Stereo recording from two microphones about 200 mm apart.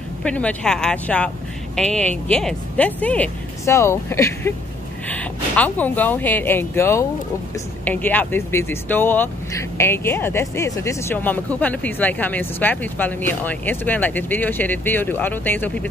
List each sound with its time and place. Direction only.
0.2 s speech: 5° left (ahead or behind)